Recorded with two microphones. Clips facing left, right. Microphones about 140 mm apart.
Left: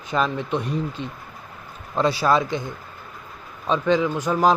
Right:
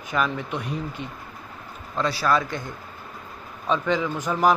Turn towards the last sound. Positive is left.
turn(degrees=20)  # may be behind; listen again after turning